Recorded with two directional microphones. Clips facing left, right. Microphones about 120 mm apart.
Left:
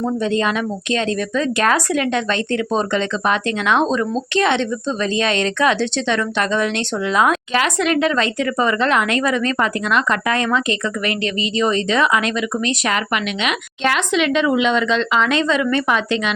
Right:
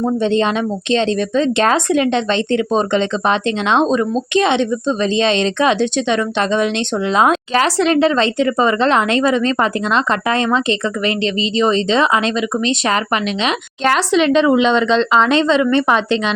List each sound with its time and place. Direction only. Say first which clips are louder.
0.0 s speech: right 3 dB; 25° right (ahead or behind)